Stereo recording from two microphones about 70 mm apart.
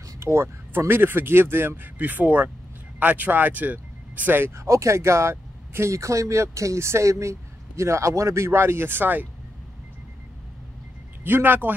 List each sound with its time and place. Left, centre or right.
0.2 s speech: right
4.6 s speech: right
11.2 s speech: right